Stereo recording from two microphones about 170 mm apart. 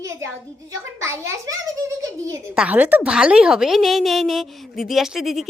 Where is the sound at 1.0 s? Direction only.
20° right (ahead or behind).